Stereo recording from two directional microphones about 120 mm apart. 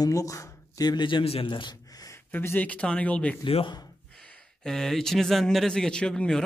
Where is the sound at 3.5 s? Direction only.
50° left (ahead or behind).